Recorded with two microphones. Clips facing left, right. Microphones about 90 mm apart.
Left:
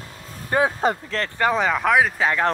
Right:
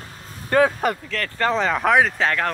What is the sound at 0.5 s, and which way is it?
Speech, 20° left (ahead or behind).